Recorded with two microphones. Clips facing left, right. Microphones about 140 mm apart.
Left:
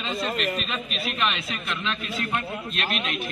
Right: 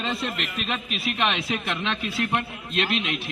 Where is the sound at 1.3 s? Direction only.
75° right (ahead or behind).